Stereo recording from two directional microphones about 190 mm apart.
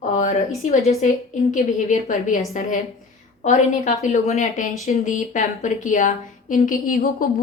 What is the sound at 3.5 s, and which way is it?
Speech, 40° left (ahead or behind).